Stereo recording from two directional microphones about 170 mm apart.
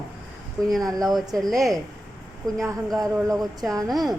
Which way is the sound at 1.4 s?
Centre (ahead or behind).